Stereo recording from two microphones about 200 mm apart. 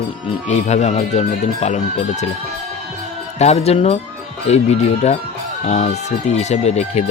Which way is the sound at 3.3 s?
30° left (ahead or behind).